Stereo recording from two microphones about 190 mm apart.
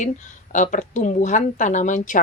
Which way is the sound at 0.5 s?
40° left (ahead or behind).